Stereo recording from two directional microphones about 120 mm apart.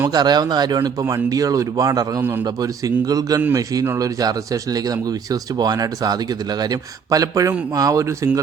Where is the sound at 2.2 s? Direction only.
20° right (ahead or behind).